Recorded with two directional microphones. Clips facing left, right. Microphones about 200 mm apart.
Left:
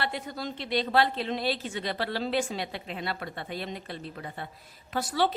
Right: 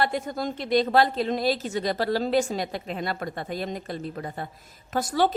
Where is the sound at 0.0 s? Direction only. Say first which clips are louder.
Right 7 dB; 45° right (ahead or behind).